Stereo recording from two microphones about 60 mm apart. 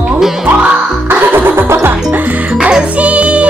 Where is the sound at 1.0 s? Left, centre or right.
Right.